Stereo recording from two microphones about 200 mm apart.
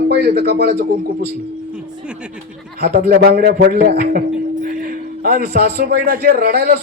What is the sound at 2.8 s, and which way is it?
Speech, 50° right (ahead or behind).